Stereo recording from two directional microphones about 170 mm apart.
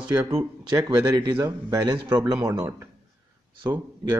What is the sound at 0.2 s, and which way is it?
Speech, 15° right (ahead or behind).